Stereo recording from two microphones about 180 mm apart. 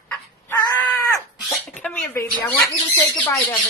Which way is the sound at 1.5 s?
5° left (ahead or behind).